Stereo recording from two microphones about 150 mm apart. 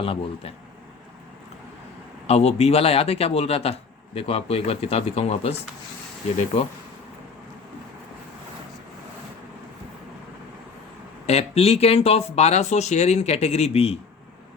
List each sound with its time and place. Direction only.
0.0 s a man's voice: 40° left (ahead or behind)
2.2 s a man's voice: 45° left (ahead or behind)
11.3 s speech: 45° left (ahead or behind)